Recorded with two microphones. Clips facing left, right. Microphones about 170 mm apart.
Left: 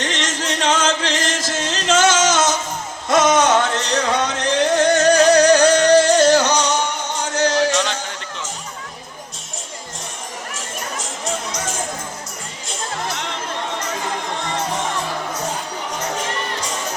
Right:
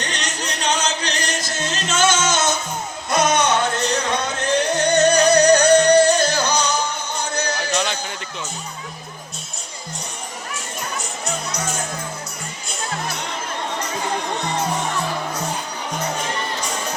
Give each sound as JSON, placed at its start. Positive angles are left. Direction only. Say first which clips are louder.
{"t": 0.0, "sound": "music", "louder": "left 4 dB", "side_deg": 90}